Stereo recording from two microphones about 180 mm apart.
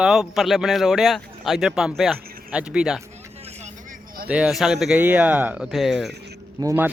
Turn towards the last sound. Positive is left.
turn(degrees=-15)  # may be behind; listen again after turning